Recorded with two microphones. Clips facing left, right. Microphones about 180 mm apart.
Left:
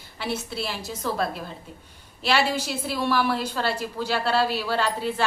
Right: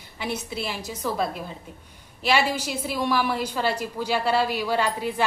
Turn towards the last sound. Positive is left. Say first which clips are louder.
# right 1 dB
turn(degrees=-15)  # may be behind; listen again after turning